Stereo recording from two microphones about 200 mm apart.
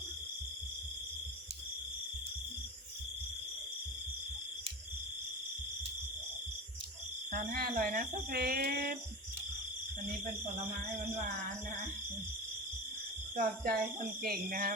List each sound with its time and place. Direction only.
7.3 s speech: 45° right (ahead or behind)
13.3 s speech: 45° right (ahead or behind)